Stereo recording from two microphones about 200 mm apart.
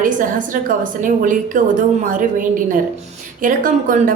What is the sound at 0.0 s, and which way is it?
A woman's voice, 40° right (ahead or behind).